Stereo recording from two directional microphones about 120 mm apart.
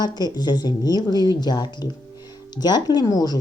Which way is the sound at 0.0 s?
35° left (ahead or behind).